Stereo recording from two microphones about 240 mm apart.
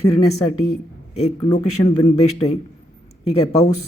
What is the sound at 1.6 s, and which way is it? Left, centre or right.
Speech, left.